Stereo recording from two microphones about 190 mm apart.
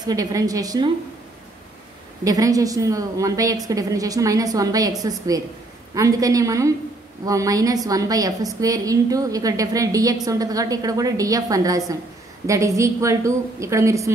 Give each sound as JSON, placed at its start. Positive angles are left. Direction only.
{"t": 0.0, "sound": "a woman's voice", "side_deg": -20}
{"t": 2.2, "sound": "a woman's voice", "side_deg": -20}